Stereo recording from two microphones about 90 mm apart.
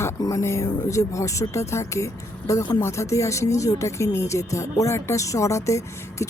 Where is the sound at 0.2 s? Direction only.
40° left (ahead or behind).